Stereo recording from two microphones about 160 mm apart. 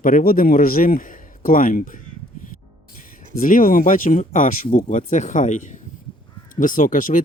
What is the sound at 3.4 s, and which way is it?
A man's voice, 60° left (ahead or behind).